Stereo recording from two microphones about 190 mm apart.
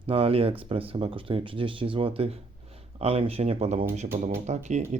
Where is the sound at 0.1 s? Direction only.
30° right (ahead or behind).